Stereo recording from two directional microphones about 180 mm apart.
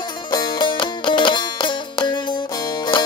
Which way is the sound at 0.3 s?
25° left (ahead or behind).